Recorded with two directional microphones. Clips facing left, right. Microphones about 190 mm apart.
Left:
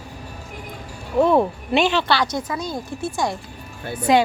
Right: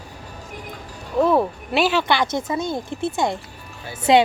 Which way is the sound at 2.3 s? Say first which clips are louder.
Right 2 dB; 25° right (ahead or behind).